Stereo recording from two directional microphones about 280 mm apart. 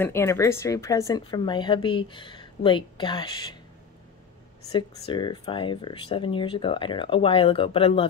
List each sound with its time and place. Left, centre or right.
0.0 s speech: centre
4.7 s speech: centre